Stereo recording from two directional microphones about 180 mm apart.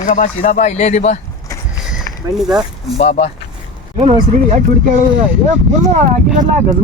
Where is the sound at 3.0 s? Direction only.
35° left (ahead or behind).